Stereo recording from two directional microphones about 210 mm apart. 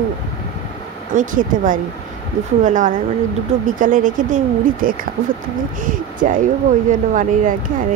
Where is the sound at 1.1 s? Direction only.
40° right (ahead or behind).